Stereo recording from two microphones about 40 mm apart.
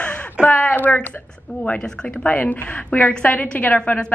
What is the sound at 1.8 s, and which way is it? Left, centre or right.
Speech, centre.